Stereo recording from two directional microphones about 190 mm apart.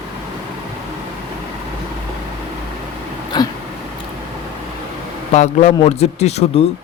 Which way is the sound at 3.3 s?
20° left (ahead or behind).